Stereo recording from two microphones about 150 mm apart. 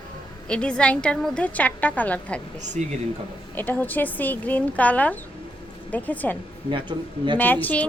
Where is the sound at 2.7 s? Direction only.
50° right (ahead or behind).